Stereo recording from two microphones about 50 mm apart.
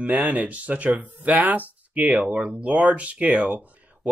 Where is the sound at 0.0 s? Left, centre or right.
Right.